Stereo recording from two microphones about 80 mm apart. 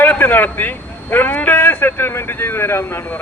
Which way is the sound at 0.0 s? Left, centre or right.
Left.